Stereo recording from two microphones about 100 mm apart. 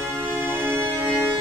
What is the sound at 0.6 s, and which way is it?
Music, 20° right (ahead or behind).